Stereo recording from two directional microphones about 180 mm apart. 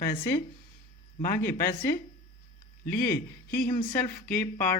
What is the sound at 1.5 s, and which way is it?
Speech, 55° left (ahead or behind).